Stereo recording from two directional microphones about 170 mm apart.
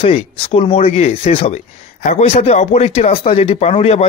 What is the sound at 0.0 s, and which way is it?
Speech, 35° left (ahead or behind).